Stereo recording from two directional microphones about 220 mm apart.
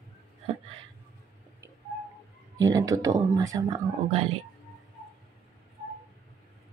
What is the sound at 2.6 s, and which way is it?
Speech, 15° right (ahead or behind).